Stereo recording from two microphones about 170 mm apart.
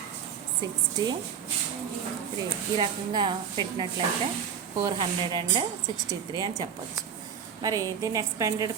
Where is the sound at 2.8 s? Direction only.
25° right (ahead or behind).